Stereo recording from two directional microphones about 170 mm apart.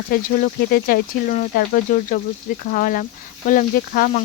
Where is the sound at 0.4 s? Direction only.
55° left (ahead or behind).